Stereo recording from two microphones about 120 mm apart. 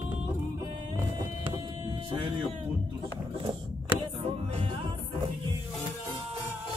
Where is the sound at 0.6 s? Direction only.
30° right (ahead or behind).